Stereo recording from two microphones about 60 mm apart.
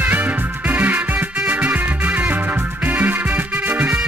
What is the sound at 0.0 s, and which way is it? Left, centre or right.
Music, right.